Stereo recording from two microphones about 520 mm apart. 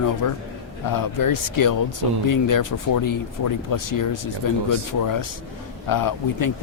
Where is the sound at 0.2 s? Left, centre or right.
Left.